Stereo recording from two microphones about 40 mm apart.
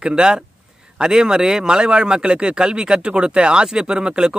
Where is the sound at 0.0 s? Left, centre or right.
Centre.